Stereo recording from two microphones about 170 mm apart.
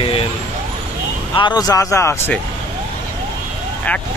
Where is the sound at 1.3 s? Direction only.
25° left (ahead or behind).